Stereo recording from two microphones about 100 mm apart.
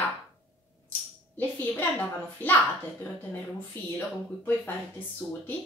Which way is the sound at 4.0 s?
20° left (ahead or behind).